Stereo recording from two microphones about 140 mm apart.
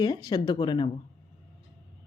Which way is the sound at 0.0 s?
30° left (ahead or behind).